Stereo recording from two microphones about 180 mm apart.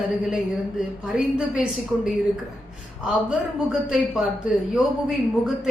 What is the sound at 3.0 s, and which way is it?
A woman's voice, 5° right (ahead or behind).